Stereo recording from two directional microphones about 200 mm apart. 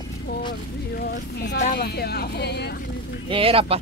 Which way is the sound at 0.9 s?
55° left (ahead or behind).